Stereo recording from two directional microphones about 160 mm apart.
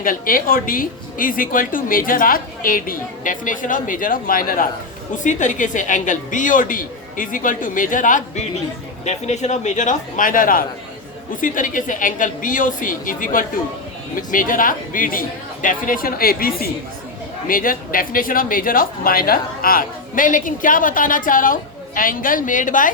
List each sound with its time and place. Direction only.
0.0 s speech: 60° left (ahead or behind)
5.1 s a woman's voice: 50° left (ahead or behind)